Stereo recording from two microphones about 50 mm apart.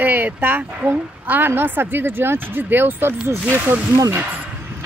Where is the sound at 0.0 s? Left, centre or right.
Right.